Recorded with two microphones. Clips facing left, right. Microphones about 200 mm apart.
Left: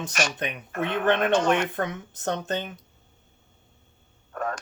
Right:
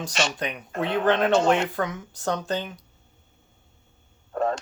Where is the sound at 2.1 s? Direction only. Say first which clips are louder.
Right 2 dB; 20° left (ahead or behind).